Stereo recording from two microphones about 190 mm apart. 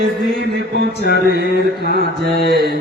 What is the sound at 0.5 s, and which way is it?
Music, 60° right (ahead or behind).